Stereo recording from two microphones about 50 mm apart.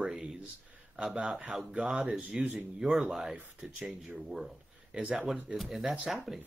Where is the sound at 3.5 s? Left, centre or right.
Right.